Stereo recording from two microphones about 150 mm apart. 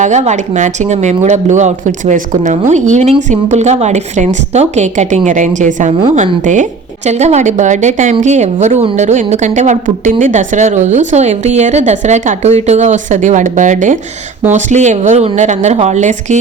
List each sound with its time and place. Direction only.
0.0 s speech: 50° right (ahead or behind)